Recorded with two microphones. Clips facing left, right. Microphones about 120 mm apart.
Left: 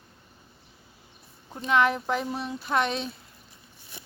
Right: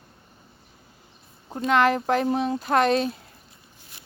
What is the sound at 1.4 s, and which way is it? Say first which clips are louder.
Speech: right 8 dB; 35° right (ahead or behind).